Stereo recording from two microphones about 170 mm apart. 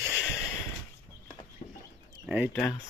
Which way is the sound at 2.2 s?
10° right (ahead or behind).